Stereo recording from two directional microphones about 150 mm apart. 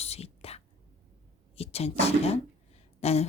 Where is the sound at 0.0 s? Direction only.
45° left (ahead or behind).